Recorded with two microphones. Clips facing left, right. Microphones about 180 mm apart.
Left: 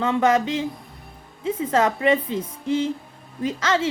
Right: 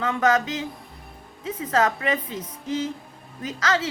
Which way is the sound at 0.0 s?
25° left (ahead or behind).